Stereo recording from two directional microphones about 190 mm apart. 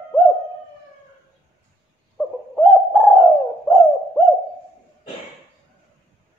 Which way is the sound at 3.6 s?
5° left (ahead or behind).